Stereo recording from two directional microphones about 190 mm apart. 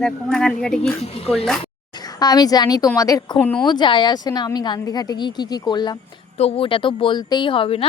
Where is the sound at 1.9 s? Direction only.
20° left (ahead or behind).